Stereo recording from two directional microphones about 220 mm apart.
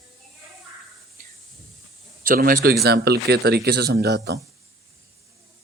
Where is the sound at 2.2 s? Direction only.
40° right (ahead or behind).